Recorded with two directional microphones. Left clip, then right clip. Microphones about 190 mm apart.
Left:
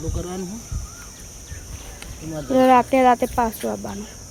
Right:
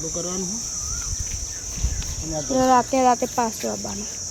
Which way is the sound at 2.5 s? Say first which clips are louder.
Left 3 dB; 15° left (ahead or behind).